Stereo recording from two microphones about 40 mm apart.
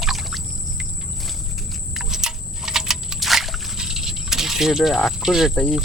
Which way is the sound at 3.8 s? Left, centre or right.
Centre.